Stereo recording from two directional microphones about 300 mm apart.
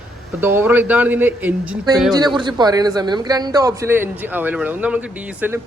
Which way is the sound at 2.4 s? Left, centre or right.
Centre.